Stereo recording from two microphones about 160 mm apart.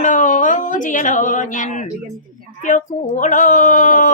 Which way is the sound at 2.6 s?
50° left (ahead or behind).